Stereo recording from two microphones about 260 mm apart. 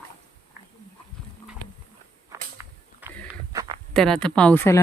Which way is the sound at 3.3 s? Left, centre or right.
Centre.